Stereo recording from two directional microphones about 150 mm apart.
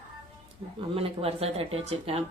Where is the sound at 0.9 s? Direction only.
40° right (ahead or behind).